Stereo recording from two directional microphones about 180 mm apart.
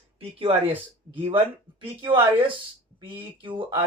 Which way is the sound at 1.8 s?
30° right (ahead or behind).